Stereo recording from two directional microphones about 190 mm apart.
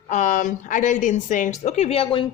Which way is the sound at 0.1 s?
40° left (ahead or behind).